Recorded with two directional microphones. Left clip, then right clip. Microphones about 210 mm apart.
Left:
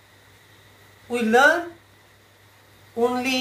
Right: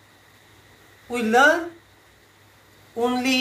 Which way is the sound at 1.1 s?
10° right (ahead or behind).